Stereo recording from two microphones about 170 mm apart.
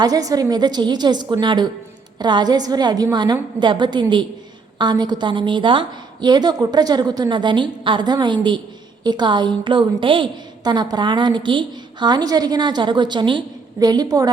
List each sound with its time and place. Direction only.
0.0 s a woman's voice: 20° right (ahead or behind)